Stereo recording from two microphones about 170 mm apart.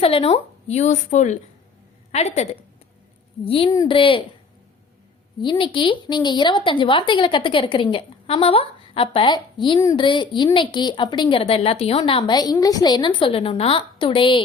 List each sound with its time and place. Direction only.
0.0 s a woman's voice: 35° left (ahead or behind)
5.4 s a woman's voice: 30° left (ahead or behind)